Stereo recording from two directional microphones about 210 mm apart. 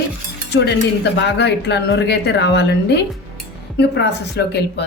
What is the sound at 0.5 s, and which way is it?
Speech, 55° left (ahead or behind).